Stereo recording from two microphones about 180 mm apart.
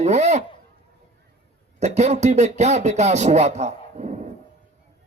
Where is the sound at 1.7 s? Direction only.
40° right (ahead or behind).